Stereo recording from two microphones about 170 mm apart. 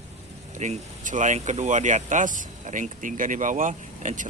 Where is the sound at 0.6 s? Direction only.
45° right (ahead or behind).